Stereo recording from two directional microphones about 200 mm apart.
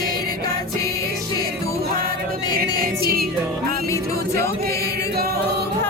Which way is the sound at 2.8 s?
50° right (ahead or behind).